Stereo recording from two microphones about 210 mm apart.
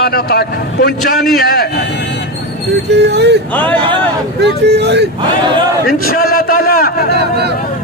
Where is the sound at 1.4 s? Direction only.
45° left (ahead or behind).